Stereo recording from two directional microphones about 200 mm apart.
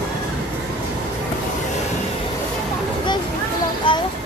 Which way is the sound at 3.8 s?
25° left (ahead or behind).